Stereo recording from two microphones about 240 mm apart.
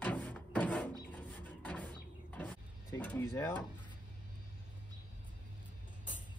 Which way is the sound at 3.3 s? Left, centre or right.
Centre.